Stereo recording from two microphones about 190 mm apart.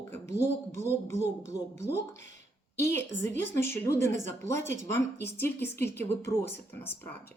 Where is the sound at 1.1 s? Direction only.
15° left (ahead or behind).